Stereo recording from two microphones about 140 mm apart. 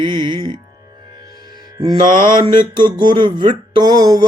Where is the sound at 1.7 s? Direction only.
30° right (ahead or behind).